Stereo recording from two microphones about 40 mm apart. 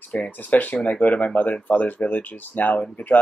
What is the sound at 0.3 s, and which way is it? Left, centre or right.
Speech, left.